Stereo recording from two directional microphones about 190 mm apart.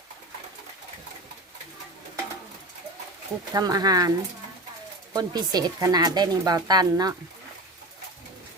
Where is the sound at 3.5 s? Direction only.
20° right (ahead or behind).